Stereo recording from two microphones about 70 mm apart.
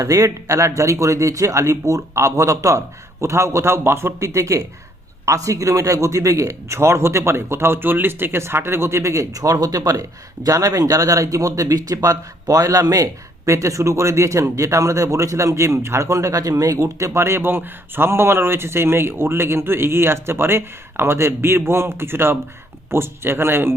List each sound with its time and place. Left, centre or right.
0.0 s a man's voice: right